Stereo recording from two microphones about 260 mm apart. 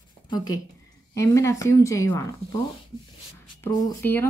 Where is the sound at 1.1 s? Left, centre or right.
Centre.